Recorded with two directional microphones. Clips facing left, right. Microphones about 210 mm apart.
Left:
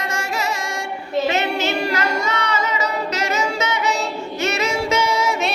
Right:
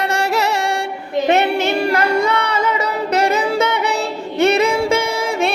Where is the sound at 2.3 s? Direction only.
55° right (ahead or behind).